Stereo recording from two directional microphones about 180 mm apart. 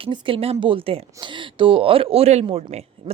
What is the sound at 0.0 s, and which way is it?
Speech, 30° right (ahead or behind).